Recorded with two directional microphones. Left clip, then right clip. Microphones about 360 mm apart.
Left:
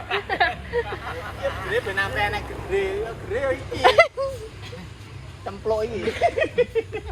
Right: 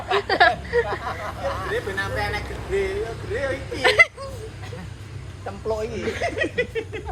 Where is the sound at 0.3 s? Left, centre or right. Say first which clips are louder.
Right 6 dB; centre.